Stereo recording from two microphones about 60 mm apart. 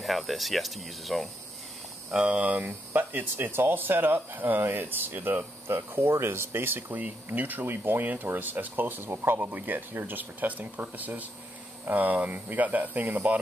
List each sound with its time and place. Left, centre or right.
0.0 s speech: centre
2.0 s speech: centre